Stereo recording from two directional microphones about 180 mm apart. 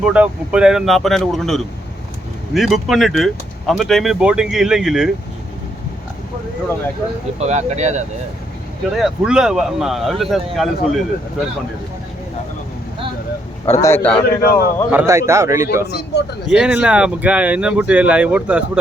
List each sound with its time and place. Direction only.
0.0 s speech: 5° right (ahead or behind)
7.3 s speech: 40° right (ahead or behind)
9.0 s speech: 5° right (ahead or behind)
13.8 s a man's voice: 10° left (ahead or behind)
14.4 s a man's voice: 55° left (ahead or behind)
14.9 s speech: 15° right (ahead or behind)
15.9 s a man's voice: 65° left (ahead or behind)
16.5 s speech: 5° right (ahead or behind)